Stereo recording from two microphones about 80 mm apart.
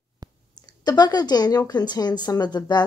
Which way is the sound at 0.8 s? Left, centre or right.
Left.